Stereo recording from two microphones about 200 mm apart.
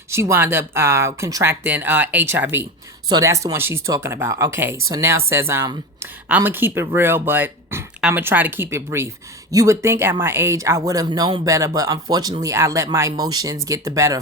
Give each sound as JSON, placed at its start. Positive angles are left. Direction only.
{"t": 0.1, "sound": "speech", "side_deg": -15}